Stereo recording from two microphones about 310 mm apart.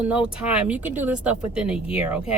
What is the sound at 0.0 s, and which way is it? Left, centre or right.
Speech, centre.